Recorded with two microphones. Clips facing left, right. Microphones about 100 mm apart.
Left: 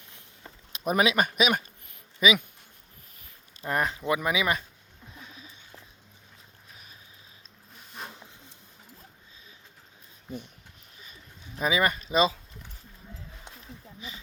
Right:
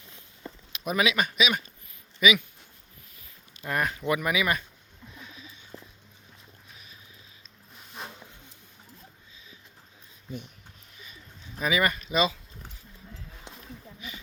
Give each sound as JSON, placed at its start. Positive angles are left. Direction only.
{"t": 0.7, "sound": "speech", "side_deg": 35}
{"t": 2.2, "sound": "speech", "side_deg": 30}
{"t": 3.6, "sound": "speech", "side_deg": 25}
{"t": 11.6, "sound": "speech", "side_deg": 25}